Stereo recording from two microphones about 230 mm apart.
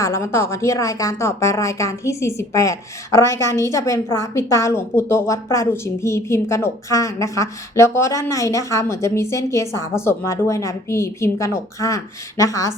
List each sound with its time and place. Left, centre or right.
0.0 s a woman's voice: centre